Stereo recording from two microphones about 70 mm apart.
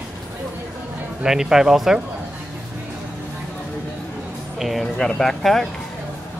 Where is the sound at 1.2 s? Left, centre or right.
Centre.